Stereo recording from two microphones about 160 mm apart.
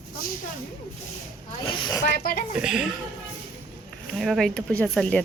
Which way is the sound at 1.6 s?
30° left (ahead or behind).